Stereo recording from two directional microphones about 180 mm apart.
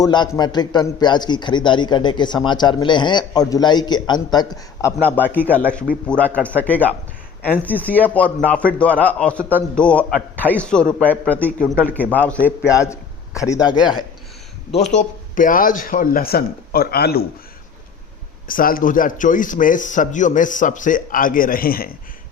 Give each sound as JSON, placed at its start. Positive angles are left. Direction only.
{"t": 0.0, "sound": "a man's voice", "side_deg": 25}
{"t": 13.7, "sound": "a man's voice", "side_deg": -5}
{"t": 14.9, "sound": "a man's voice", "side_deg": 45}
{"t": 18.4, "sound": "a man's voice", "side_deg": 50}